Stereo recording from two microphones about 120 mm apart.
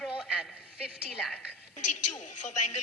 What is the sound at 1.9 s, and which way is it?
Speech, 90° left.